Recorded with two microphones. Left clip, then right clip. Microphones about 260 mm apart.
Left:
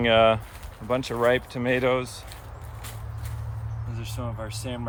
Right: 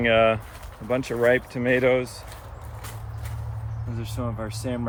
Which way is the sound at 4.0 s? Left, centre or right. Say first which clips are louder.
Right 3 dB; centre.